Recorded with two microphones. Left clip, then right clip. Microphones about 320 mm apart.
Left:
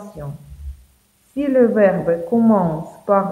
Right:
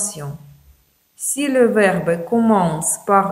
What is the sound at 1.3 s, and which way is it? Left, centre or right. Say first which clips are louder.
A woman's voice: even; right.